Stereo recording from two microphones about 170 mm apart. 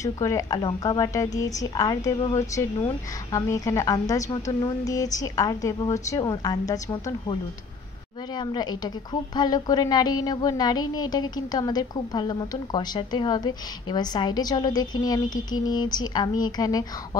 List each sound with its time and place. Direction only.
0.0 s speech: 20° left (ahead or behind)
8.4 s speech: 25° left (ahead or behind)